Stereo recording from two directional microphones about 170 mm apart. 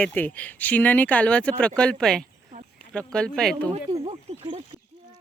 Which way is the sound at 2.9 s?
5° left (ahead or behind).